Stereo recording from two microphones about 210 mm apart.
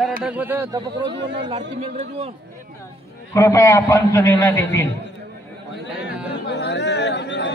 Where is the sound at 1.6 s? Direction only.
30° right (ahead or behind).